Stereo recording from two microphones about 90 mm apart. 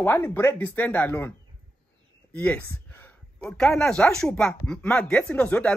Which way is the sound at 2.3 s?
15° left (ahead or behind).